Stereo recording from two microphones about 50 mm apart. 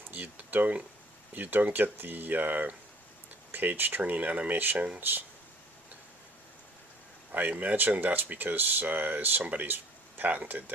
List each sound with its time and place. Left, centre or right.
0.1 s speech: right
7.3 s speech: right